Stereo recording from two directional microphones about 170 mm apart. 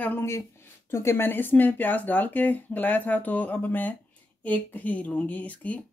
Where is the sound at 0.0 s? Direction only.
15° left (ahead or behind).